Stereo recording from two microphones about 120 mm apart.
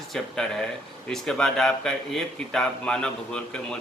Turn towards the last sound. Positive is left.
turn(degrees=5)  # may be behind; listen again after turning